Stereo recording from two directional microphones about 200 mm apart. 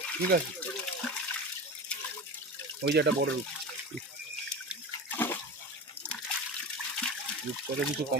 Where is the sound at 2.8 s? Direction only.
60° right (ahead or behind).